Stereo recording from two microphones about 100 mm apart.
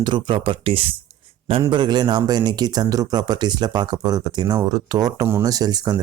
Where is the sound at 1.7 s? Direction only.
45° right (ahead or behind).